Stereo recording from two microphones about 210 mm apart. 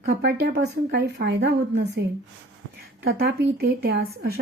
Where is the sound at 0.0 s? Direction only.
55° right (ahead or behind).